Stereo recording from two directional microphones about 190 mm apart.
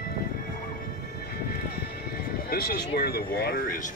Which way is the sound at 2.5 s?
50° left (ahead or behind).